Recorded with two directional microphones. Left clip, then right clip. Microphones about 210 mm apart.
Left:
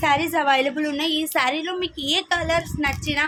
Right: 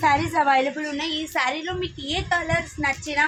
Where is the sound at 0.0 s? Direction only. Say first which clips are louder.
Even; 30° left (ahead or behind).